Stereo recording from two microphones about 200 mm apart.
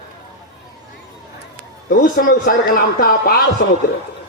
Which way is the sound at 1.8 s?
45° left (ahead or behind).